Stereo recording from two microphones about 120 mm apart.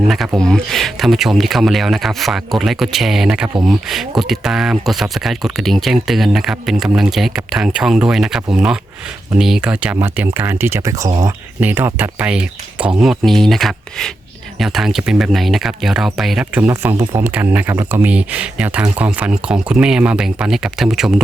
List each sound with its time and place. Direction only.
0.1 s speech: centre (ahead or behind)
16.6 s speech: 15° right (ahead or behind)
17.0 s speech: 35° right (ahead or behind)
17.2 s speech: 15° right (ahead or behind)
18.1 s speech: 10° right (ahead or behind)